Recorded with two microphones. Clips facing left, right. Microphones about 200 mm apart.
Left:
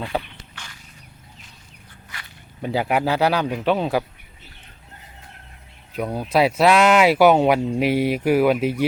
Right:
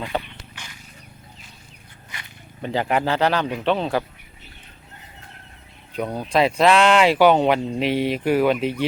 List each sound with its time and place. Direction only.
0.1 s speech: 5° left (ahead or behind)
0.5 s wild animals: 15° right (ahead or behind)
2.6 s speech: 10° left (ahead or behind)
6.0 s speech: 5° left (ahead or behind)